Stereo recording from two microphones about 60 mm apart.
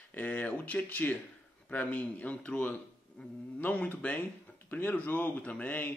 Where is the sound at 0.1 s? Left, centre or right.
Left.